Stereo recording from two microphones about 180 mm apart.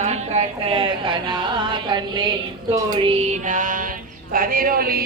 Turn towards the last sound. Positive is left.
turn(degrees=-55)  # may be behind; listen again after turning